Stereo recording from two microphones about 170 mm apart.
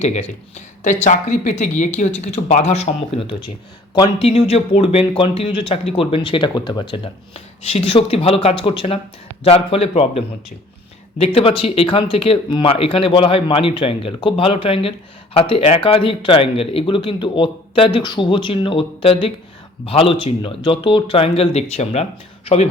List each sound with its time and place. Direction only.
0.0 s speech: 40° left (ahead or behind)